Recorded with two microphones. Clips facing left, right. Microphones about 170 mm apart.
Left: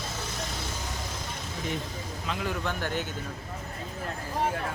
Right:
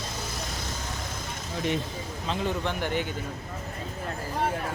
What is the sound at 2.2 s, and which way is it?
Speech, 25° right (ahead or behind).